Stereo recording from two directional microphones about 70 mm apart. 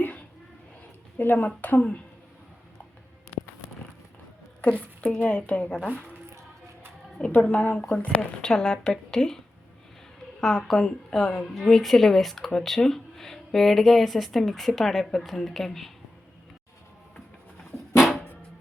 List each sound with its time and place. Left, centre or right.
1.2 s a woman's voice: left
4.6 s a woman's voice: centre
7.3 s a woman's voice: left
10.4 s a woman's voice: centre
17.9 s music: centre